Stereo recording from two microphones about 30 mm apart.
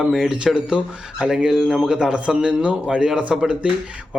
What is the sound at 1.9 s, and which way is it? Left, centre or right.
A man's voice, right.